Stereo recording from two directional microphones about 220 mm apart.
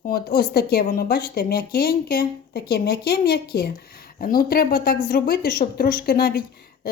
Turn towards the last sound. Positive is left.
turn(degrees=45)  # may be behind; listen again after turning